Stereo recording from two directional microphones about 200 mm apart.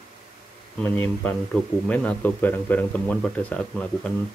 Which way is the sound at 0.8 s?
5° left (ahead or behind).